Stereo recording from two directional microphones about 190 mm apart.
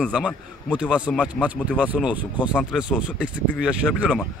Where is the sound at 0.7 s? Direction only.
5° right (ahead or behind).